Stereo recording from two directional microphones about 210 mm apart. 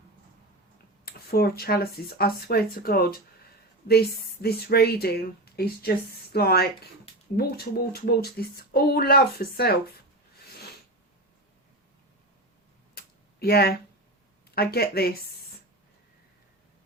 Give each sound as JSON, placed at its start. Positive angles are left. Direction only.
{"t": 1.0, "sound": "speech", "side_deg": 45}
{"t": 12.9, "sound": "a sound", "side_deg": 50}
{"t": 14.5, "sound": "speech", "side_deg": 50}